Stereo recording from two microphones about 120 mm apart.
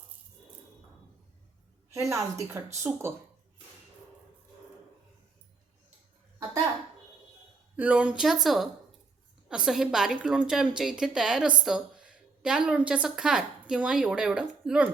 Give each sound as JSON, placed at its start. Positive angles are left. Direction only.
{"t": 1.9, "sound": "a woman's voice", "side_deg": -25}
{"t": 7.8, "sound": "a woman's voice", "side_deg": -10}